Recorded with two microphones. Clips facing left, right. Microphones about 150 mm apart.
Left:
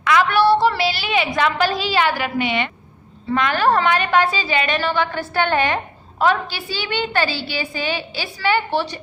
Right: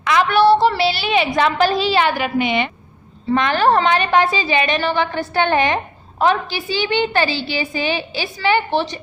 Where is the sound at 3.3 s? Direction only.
30° right (ahead or behind).